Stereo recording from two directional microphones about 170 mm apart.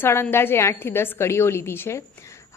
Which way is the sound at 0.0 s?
15° left (ahead or behind).